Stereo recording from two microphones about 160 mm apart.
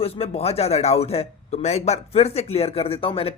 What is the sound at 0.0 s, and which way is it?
A man's voice, 40° left (ahead or behind).